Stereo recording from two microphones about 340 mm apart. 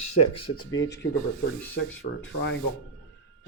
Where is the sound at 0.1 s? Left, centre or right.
Left.